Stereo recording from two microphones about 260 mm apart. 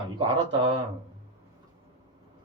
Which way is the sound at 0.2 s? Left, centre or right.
Centre.